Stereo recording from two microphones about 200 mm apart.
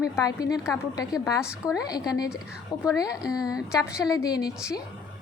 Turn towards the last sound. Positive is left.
turn(degrees=20)  # may be behind; listen again after turning